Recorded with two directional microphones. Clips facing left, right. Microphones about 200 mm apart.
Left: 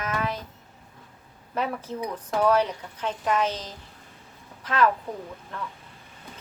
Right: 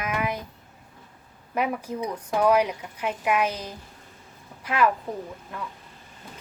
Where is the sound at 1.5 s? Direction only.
10° right (ahead or behind).